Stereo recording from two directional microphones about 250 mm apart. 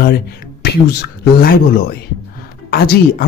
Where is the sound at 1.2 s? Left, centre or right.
Left.